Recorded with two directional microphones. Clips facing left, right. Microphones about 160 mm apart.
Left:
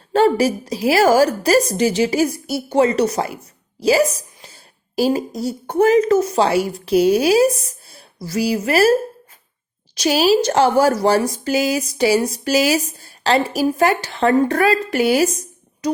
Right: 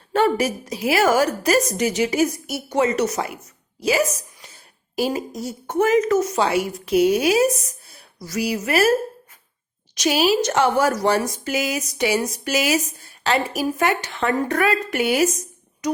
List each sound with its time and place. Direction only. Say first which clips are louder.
0.1 s a woman's voice: left 4 dB; 30° left (ahead or behind)